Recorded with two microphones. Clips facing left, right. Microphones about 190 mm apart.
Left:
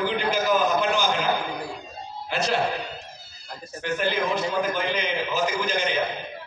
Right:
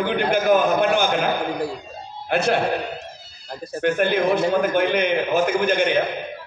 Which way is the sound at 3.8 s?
55° right (ahead or behind).